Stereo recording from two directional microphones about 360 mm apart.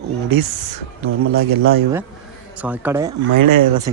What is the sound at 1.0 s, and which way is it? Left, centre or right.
Speech, right.